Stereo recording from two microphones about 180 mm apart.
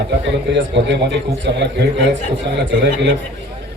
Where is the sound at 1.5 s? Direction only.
70° right (ahead or behind).